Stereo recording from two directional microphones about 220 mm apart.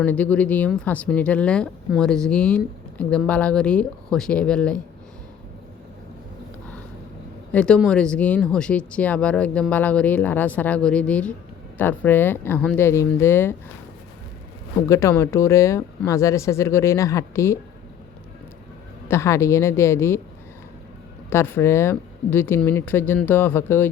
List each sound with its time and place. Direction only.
0.0 s speech: 5° left (ahead or behind)
7.5 s speech: 5° left (ahead or behind)
14.8 s speech: 15° left (ahead or behind)
19.0 s speech: 10° left (ahead or behind)
21.2 s speech: 10° left (ahead or behind)